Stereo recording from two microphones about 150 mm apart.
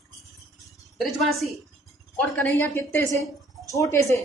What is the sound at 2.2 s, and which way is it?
A woman's voice, 10° left (ahead or behind).